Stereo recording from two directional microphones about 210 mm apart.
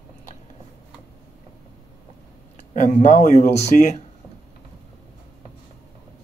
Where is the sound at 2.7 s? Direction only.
35° left (ahead or behind).